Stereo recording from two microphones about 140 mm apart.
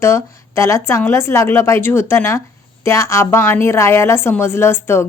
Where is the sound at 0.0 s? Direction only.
20° left (ahead or behind).